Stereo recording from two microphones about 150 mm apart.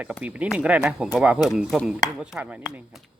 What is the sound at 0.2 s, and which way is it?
Speech, 10° right (ahead or behind).